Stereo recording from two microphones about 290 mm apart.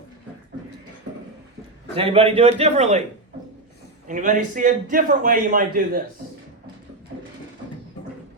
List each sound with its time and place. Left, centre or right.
2.0 s a man's voice: centre
4.0 s a man's voice: right